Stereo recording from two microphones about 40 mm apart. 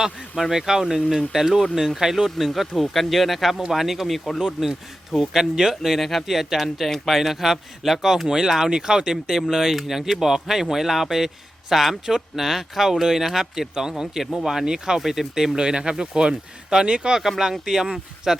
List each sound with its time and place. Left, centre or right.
0.0 s speech: centre
2.5 s speech: centre
4.4 s speech: centre
6.0 s speech: centre
9.3 s speech: centre
15.0 s speech: centre
15.5 s speech: centre
17.2 s speech: centre